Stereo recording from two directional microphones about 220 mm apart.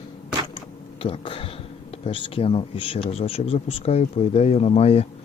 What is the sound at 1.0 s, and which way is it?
Speech, 25° left (ahead or behind).